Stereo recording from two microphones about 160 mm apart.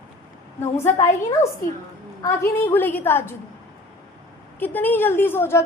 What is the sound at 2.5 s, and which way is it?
Speech, 10° left (ahead or behind).